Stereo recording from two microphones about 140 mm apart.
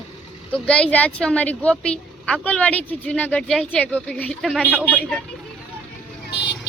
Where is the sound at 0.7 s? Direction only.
10° left (ahead or behind).